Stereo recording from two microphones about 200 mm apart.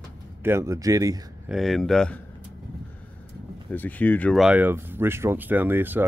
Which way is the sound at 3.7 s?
10° left (ahead or behind).